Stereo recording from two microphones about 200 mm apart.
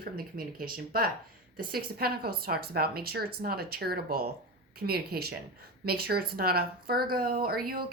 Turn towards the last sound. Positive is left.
turn(degrees=-50)  # may be behind; listen again after turning